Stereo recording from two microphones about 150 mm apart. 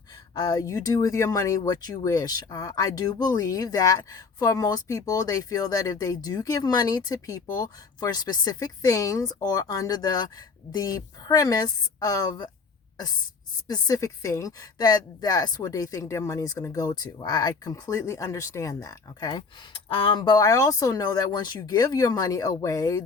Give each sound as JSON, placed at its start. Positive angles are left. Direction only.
{"t": 0.3, "sound": "speech", "side_deg": 25}
{"t": 13.7, "sound": "speech", "side_deg": 25}